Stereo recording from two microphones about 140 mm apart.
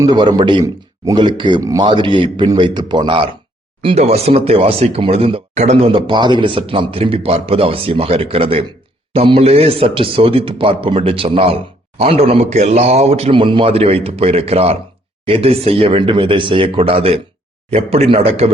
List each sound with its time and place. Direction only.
0.0 s speech: 30° right (ahead or behind)
3.8 s speech: 45° right (ahead or behind)
5.9 s speech: 35° right (ahead or behind)